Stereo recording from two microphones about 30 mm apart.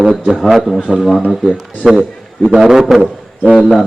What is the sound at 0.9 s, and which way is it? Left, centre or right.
A man's voice, centre.